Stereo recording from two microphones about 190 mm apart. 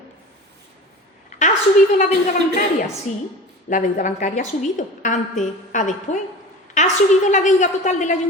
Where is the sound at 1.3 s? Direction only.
40° left (ahead or behind).